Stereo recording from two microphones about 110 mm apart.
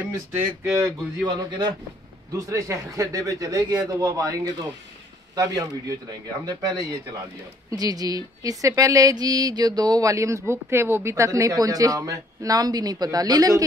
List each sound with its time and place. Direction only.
0.7 s speech: 30° right (ahead or behind)
1.2 s speech: 40° right (ahead or behind)
2.3 s speech: 30° right (ahead or behind)